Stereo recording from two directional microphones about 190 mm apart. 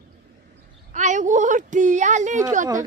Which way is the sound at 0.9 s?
40° right (ahead or behind).